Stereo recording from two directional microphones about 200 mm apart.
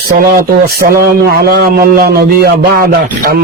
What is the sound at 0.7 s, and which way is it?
A man's voice, 50° right (ahead or behind).